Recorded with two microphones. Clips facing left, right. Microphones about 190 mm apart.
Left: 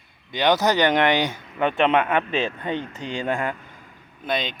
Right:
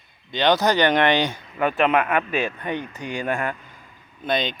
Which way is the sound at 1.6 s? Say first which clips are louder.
Even; 25° left (ahead or behind).